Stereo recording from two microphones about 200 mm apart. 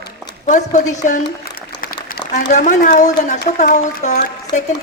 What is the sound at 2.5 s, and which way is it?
A woman's voice, 40° left (ahead or behind).